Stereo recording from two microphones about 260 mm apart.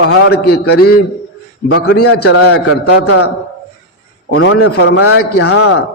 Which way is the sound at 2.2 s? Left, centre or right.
Left.